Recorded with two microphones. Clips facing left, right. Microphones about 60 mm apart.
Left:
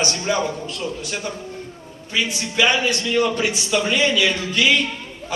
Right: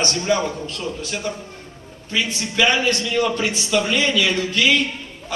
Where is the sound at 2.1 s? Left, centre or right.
Centre.